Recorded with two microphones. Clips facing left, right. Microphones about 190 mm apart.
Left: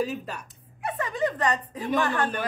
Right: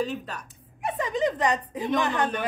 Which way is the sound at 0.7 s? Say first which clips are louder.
Right 2 dB; 20° right (ahead or behind).